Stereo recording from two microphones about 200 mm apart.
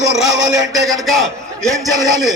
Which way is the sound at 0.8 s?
Centre (ahead or behind).